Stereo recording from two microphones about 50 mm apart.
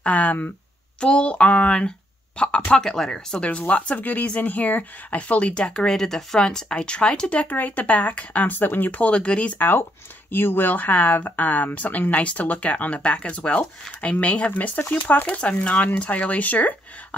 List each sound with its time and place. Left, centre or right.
0.0 s speech: left
1.0 s speech: left
2.8 s speech: centre
3.3 s speech: left
8.9 s speech: left
9.6 s speech: left